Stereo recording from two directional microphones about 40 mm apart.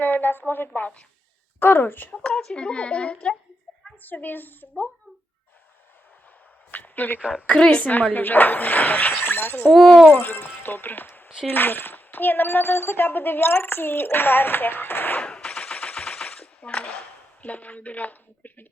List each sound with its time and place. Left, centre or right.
0.0 s a woman's voice: left
2.3 s a child's voice: centre
2.6 s a woman's voice: left
4.0 s speech: left
6.7 s a sound: left
7.2 s a woman's voice: right
7.5 s a child's voice: centre
7.8 s speech: left
9.2 s speech: left
10.1 s speech: left
15.2 s machine gun: left
17.4 s a woman's voice: left